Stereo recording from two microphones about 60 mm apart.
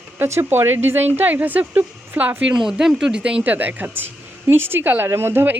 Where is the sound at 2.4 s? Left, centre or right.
Centre.